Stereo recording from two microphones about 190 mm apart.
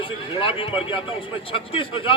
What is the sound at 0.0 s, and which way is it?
A man's voice, 25° left (ahead or behind).